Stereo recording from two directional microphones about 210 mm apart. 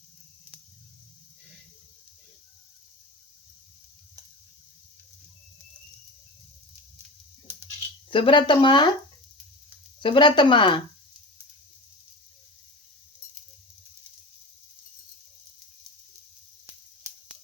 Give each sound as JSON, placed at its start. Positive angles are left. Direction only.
{"t": 7.5, "sound": "a sound", "side_deg": -10}
{"t": 8.1, "sound": "speech", "side_deg": 25}
{"t": 10.0, "sound": "speech", "side_deg": 25}